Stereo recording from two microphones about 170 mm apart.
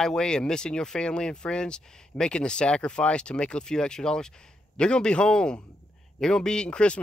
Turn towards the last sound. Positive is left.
turn(degrees=5)  # may be behind; listen again after turning